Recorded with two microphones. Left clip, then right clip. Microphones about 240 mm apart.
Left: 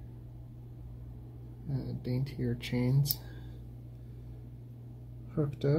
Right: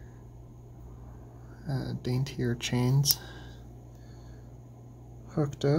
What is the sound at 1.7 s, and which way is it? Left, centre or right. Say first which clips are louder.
Speech: right 4 dB; right.